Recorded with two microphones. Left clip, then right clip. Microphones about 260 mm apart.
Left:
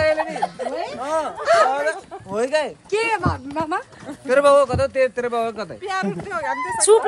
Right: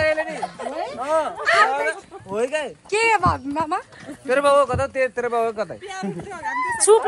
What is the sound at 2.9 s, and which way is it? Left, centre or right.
Speech, right.